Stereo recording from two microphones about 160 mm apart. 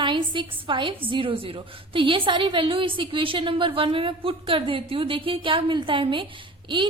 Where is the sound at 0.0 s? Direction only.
30° right (ahead or behind).